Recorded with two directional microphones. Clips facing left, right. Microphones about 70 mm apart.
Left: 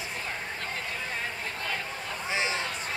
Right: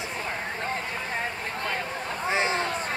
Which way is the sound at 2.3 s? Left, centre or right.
Right.